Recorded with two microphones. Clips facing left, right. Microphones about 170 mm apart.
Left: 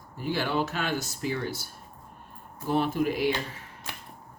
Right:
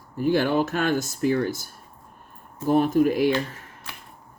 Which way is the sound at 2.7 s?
45° right (ahead or behind).